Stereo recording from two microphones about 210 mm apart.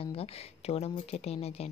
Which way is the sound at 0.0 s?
25° left (ahead or behind).